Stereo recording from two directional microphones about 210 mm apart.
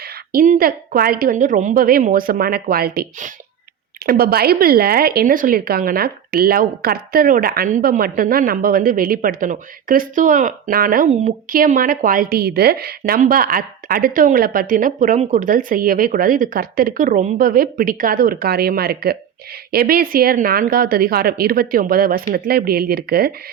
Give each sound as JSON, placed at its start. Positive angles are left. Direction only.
{"t": 0.0, "sound": "speech", "side_deg": -40}